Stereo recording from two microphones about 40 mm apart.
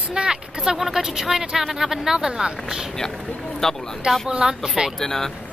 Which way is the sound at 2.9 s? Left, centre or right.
Centre.